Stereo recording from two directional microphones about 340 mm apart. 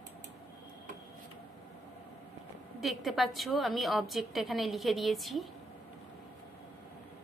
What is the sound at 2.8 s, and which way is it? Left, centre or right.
A woman's voice, centre.